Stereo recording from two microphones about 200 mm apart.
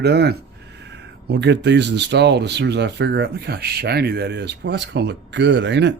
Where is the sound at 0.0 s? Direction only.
55° right (ahead or behind).